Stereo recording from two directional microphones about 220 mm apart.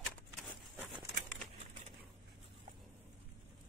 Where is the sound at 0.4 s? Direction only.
Centre (ahead or behind).